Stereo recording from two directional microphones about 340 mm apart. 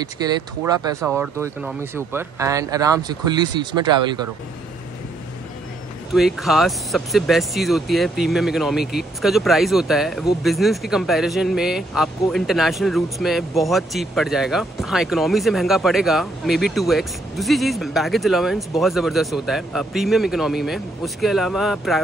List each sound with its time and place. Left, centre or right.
0.0 s speech: centre
6.1 s speech: centre